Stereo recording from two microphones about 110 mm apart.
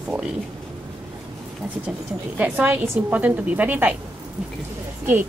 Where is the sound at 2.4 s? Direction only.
15° right (ahead or behind).